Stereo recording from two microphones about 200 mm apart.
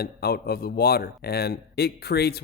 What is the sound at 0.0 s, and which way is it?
A man's voice, 50° left (ahead or behind).